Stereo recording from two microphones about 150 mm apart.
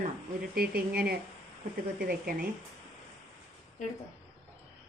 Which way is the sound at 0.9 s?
90° right.